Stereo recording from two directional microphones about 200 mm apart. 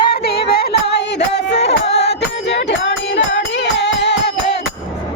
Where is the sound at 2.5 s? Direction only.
60° left (ahead or behind).